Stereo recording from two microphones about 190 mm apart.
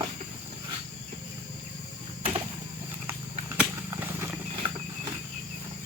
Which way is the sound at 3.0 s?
10° right (ahead or behind).